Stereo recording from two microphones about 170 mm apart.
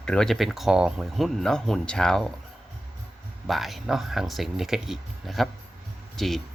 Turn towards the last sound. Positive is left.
turn(degrees=0)  # may be behind; listen again after turning